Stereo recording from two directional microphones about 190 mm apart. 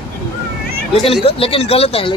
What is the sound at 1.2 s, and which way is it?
Speech, 30° left (ahead or behind).